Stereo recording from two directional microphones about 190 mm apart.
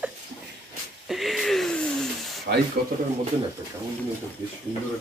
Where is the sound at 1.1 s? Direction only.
Centre (ahead or behind).